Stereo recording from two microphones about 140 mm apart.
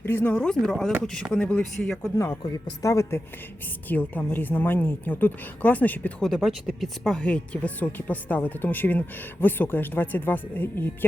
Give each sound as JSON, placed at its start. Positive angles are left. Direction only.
{"t": 0.0, "sound": "a woman's voice", "side_deg": 15}
{"t": 2.1, "sound": "a woman's voice", "side_deg": 20}